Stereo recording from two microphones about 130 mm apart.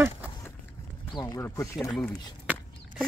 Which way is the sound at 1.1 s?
25° left (ahead or behind).